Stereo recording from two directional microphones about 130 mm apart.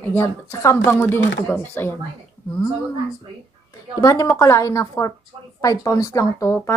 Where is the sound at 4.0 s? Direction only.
25° left (ahead or behind).